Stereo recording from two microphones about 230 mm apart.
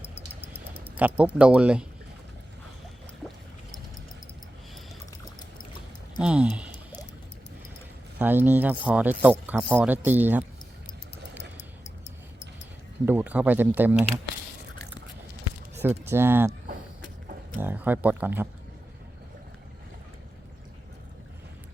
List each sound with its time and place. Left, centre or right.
0.9 s speech: centre
6.2 s speech: centre
8.2 s speech: centre
13.1 s speech: centre
15.7 s speech: centre
17.6 s speech: centre